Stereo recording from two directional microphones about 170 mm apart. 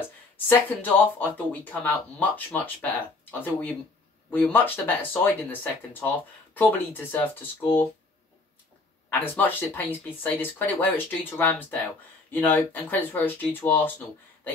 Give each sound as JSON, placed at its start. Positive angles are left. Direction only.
{"t": 0.5, "sound": "speech", "side_deg": 10}
{"t": 9.2, "sound": "speech", "side_deg": 10}